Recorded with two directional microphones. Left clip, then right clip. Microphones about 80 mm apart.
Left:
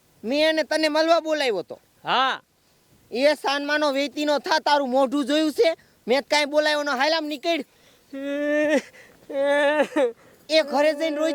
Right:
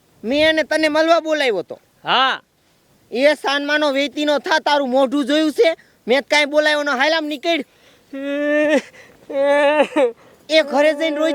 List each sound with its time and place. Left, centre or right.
0.2 s speech: right
2.0 s speech: centre
3.1 s speech: right
7.9 s speech: centre
9.3 s speech: left
10.4 s speech: right